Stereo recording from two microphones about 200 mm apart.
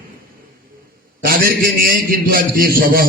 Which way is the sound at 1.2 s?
45° right (ahead or behind).